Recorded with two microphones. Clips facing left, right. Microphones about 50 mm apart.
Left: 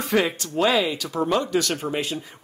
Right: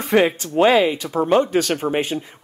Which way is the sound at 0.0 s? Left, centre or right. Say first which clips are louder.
Right 5 dB; right.